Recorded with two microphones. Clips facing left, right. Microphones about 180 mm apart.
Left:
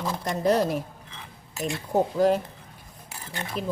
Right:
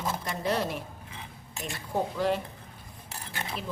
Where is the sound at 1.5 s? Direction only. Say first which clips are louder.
Left 9 dB; centre (ahead or behind).